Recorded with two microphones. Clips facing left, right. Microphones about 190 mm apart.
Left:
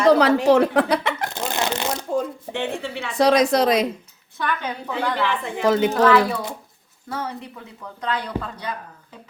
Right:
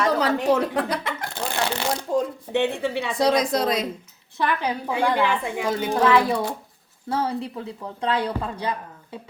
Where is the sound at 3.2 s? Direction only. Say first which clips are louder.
Left 4 dB; 75° left (ahead or behind).